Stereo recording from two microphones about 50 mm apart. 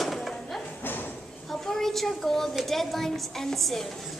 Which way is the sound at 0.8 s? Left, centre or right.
Left.